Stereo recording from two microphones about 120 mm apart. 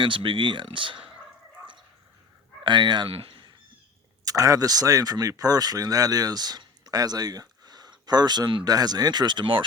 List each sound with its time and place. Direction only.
0.0 s speech: 45° right (ahead or behind)
2.6 s speech: 40° right (ahead or behind)
3.2 s a sound: 45° right (ahead or behind)
4.3 s speech: 30° right (ahead or behind)